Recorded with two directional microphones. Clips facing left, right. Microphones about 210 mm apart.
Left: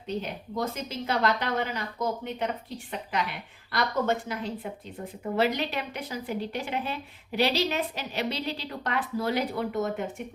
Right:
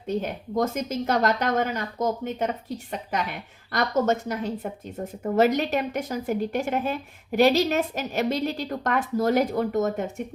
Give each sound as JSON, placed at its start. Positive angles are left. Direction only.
{"t": 0.1, "sound": "a woman's voice", "side_deg": -50}